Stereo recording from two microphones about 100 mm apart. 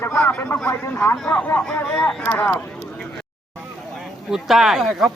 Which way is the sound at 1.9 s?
10° left (ahead or behind).